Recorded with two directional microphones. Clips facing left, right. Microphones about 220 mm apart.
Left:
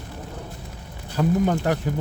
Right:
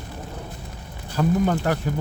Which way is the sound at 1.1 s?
20° left (ahead or behind).